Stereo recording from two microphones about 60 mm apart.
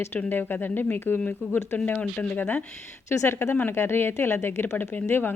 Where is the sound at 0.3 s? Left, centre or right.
Left.